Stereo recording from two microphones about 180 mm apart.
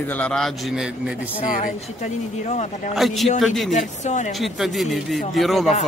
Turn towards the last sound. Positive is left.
turn(degrees=0)  # may be behind; listen again after turning